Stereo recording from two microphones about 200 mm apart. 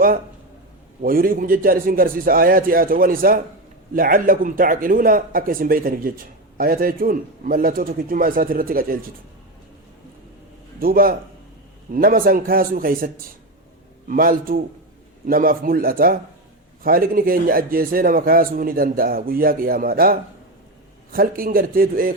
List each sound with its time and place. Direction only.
1.0 s speech: 45° right (ahead or behind)
10.8 s a man's voice: 45° right (ahead or behind)
14.1 s speech: 45° right (ahead or behind)